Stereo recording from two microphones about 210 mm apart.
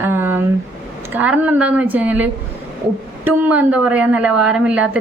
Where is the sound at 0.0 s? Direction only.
10° right (ahead or behind).